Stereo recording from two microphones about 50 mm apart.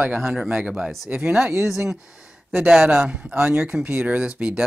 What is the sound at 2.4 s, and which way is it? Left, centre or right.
Speech, centre.